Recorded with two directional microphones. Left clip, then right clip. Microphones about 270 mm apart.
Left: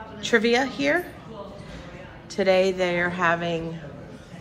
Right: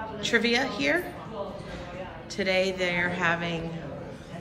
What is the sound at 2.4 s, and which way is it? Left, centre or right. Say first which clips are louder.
A woman's voice: left 6 dB; centre.